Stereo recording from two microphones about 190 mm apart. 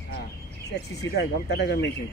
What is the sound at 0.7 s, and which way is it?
Speech, 65° left (ahead or behind).